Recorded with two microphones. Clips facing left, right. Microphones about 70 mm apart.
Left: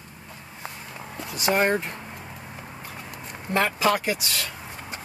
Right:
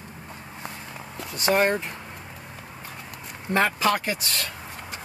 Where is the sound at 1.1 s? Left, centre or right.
Centre.